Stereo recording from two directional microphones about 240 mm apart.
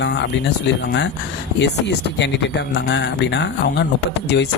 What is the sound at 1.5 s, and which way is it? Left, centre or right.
Speech, left.